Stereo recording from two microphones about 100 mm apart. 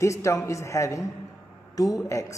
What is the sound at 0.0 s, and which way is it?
A man's voice, 30° left (ahead or behind).